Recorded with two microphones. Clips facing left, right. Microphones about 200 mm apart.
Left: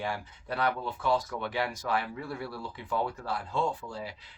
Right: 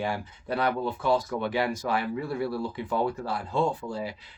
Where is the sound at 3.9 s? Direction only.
10° right (ahead or behind).